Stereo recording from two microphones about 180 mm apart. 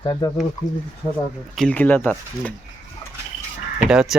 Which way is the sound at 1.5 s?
5° left (ahead or behind).